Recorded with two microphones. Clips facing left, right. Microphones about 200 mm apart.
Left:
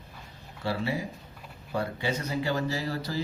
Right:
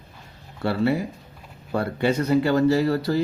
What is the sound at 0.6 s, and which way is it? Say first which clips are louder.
Speech: right 8 dB; 60° right (ahead or behind).